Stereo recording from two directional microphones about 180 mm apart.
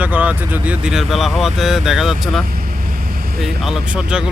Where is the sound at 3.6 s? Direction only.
5° right (ahead or behind).